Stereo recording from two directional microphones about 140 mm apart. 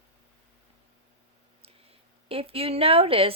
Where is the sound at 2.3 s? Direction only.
40° right (ahead or behind).